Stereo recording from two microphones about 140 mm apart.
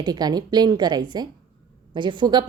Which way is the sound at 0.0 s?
30° right (ahead or behind).